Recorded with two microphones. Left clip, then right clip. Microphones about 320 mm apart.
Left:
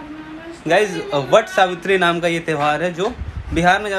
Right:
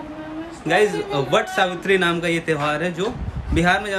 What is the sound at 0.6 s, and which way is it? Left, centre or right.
Speech, centre.